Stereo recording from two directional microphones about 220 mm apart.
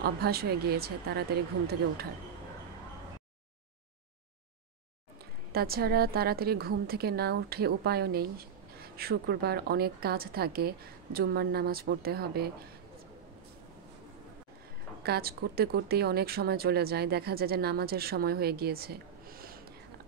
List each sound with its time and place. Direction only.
0.0 s a woman's voice: 45° right (ahead or behind)
5.5 s a woman's voice: 45° right (ahead or behind)
15.0 s a woman's voice: 45° right (ahead or behind)